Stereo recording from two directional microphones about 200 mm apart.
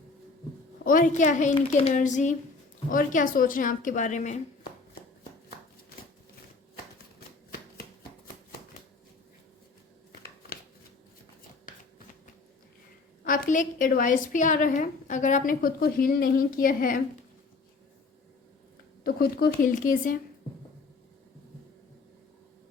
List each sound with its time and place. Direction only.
0.9 s a woman's voice: 40° left (ahead or behind)
13.2 s a woman's voice: 40° left (ahead or behind)
19.0 s speech: 50° left (ahead or behind)